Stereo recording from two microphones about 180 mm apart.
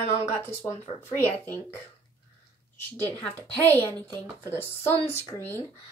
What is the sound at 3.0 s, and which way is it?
Speech, 10° left (ahead or behind).